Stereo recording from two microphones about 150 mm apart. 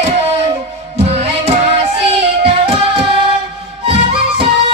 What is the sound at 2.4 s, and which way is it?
Singing, 40° right (ahead or behind).